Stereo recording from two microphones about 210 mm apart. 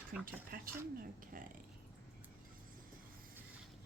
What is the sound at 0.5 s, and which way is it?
Speech, 45° right (ahead or behind).